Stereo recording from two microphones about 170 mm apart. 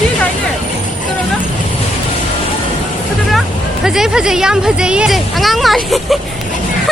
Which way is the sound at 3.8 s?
5° right (ahead or behind).